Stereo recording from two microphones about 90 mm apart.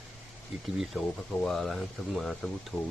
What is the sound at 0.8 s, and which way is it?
Speech, 5° left (ahead or behind).